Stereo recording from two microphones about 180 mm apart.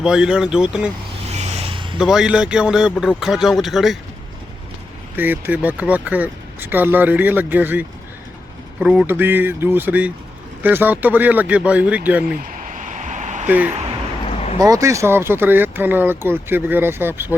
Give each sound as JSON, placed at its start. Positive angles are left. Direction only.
{"t": 0.0, "sound": "speech", "side_deg": -5}
{"t": 1.3, "sound": "vehicle", "side_deg": -35}
{"t": 2.0, "sound": "speech", "side_deg": -5}
{"t": 5.1, "sound": "speech", "side_deg": -10}
{"t": 12.5, "sound": "a sound", "side_deg": -45}
{"t": 14.3, "sound": "a sound", "side_deg": 35}
{"t": 14.6, "sound": "speech", "side_deg": -20}